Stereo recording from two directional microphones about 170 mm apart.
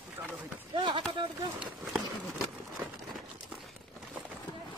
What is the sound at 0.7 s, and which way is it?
Speech, 30° right (ahead or behind).